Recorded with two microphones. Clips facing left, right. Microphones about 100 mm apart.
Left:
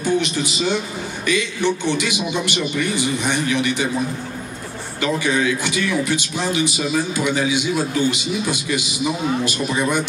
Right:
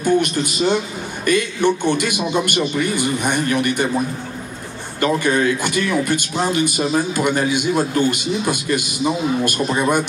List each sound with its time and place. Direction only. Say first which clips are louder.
0.0 s a man's voice: right 3 dB; 50° right (ahead or behind)
5.0 s a man's voice: right 3 dB; 50° right (ahead or behind)